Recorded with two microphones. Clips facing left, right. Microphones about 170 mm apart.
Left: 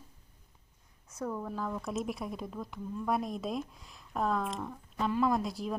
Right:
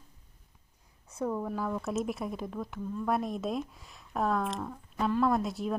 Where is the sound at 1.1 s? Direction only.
20° right (ahead or behind).